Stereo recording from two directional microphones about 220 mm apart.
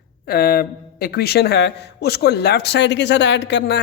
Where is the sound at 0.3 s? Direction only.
45° left (ahead or behind).